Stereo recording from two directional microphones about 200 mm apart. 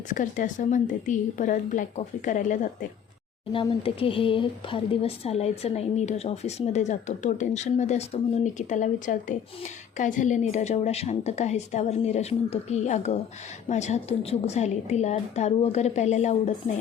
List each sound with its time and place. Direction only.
0.1 s a woman's voice: 40° left (ahead or behind)
3.5 s a woman's voice: 25° left (ahead or behind)